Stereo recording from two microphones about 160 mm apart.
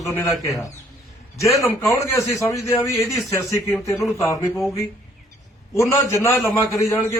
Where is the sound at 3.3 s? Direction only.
20° left (ahead or behind).